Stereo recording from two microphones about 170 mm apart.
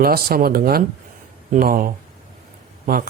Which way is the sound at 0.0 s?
60° right (ahead or behind).